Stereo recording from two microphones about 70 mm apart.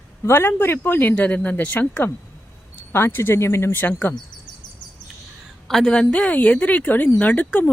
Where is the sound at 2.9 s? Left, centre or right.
Left.